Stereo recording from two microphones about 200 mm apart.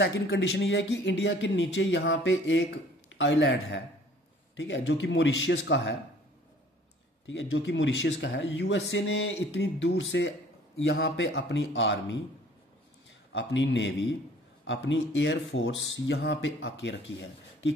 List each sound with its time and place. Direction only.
0.0 s speech: 60° left (ahead or behind)
7.2 s speech: 70° left (ahead or behind)
13.3 s speech: 65° left (ahead or behind)